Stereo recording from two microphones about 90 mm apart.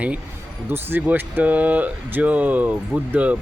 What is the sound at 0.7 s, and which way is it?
Speech, 20° right (ahead or behind).